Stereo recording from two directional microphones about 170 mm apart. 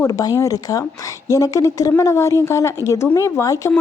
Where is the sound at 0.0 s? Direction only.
20° left (ahead or behind).